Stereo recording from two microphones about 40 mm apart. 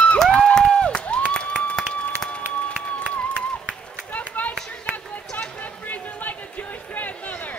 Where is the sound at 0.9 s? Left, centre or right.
Left.